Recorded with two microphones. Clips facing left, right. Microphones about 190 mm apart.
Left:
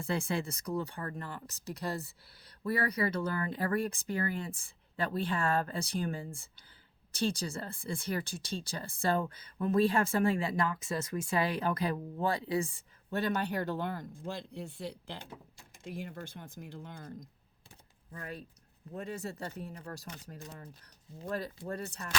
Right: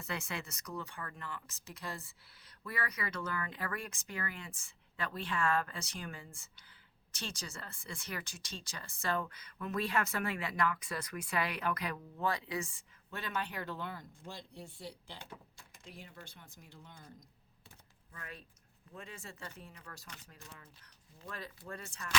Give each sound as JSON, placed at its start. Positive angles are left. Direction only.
{"t": 0.0, "sound": "speech", "side_deg": 30}
{"t": 15.8, "sound": "speech", "side_deg": 50}
{"t": 18.1, "sound": "speech", "side_deg": 35}